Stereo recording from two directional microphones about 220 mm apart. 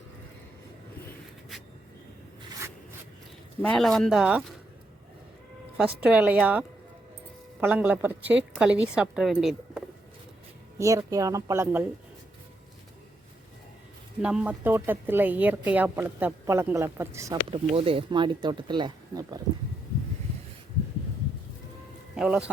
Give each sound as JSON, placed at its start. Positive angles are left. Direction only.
{"t": 3.6, "sound": "speech", "side_deg": 5}
{"t": 6.1, "sound": "speech", "side_deg": -5}
{"t": 10.8, "sound": "speech", "side_deg": -15}
{"t": 14.2, "sound": "speech", "side_deg": -5}
{"t": 17.5, "sound": "speech", "side_deg": -25}
{"t": 22.1, "sound": "speech", "side_deg": -5}